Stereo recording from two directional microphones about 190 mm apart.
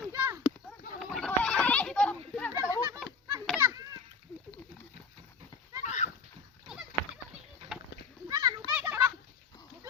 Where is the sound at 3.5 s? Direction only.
15° right (ahead or behind).